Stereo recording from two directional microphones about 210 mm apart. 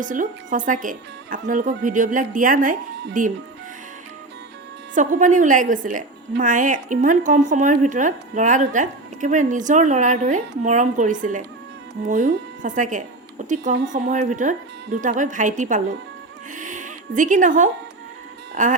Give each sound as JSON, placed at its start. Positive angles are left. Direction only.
{"t": 0.0, "sound": "speech", "side_deg": -40}
{"t": 4.9, "sound": "speech", "side_deg": -35}
{"t": 16.6, "sound": "music", "side_deg": -35}
{"t": 18.6, "sound": "speech", "side_deg": -35}